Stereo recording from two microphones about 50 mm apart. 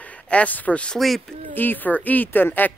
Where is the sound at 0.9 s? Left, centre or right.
Centre.